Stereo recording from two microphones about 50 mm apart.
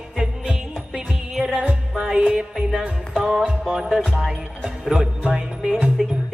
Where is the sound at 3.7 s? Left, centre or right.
Centre.